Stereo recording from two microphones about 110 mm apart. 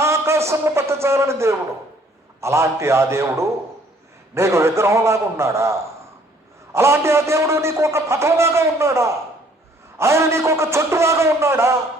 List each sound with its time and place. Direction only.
0.0 s a man's voice: 25° right (ahead or behind)
6.7 s a man's voice: 25° right (ahead or behind)